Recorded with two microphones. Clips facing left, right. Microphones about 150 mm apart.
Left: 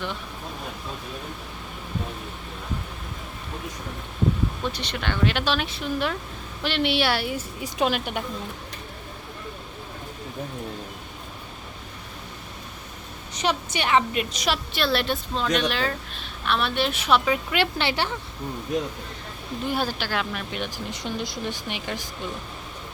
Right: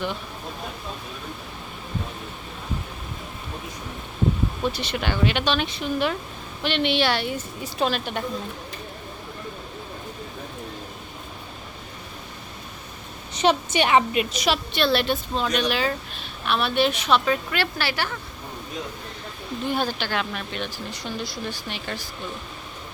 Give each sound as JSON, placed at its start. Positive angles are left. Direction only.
{"t": 4.6, "sound": "a woman's voice", "side_deg": -10}
{"t": 13.3, "sound": "a woman's voice", "side_deg": -25}
{"t": 14.1, "sound": "a woman's voice", "side_deg": -5}
{"t": 19.6, "sound": "speech", "side_deg": 5}